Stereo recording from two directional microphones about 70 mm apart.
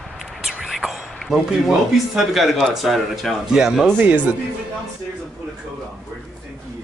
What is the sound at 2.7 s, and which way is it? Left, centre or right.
Speech, centre.